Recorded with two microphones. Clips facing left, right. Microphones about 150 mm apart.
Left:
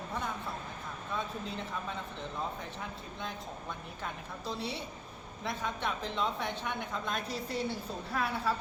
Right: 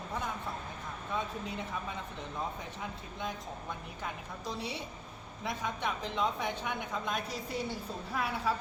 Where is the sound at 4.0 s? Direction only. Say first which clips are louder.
Even; 15° right (ahead or behind).